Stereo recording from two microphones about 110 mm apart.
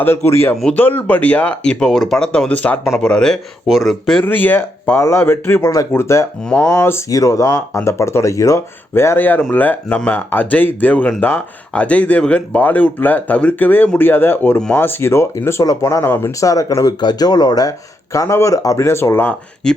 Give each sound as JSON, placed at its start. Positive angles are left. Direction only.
{"t": 0.0, "sound": "speech", "side_deg": 25}
{"t": 0.5, "sound": "speech", "side_deg": 5}
{"t": 0.8, "sound": "speech", "side_deg": 15}
{"t": 4.2, "sound": "speech", "side_deg": 15}
{"t": 19.6, "sound": "speech", "side_deg": 5}